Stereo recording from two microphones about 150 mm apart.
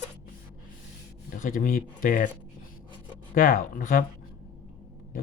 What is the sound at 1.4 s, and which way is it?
Speech, 70° left (ahead or behind).